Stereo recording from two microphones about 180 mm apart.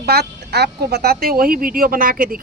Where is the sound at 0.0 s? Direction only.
60° right (ahead or behind).